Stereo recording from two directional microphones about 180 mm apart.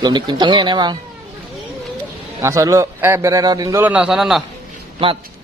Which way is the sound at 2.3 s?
20° right (ahead or behind).